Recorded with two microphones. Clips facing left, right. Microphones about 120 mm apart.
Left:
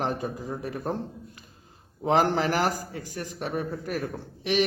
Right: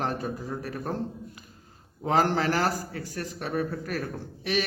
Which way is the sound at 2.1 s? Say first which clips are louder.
Left 1 dB; 20° left (ahead or behind).